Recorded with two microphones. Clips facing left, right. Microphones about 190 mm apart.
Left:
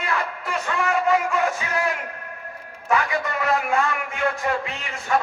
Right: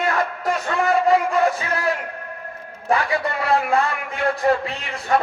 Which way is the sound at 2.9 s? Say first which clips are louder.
Right 2 dB; 35° right (ahead or behind).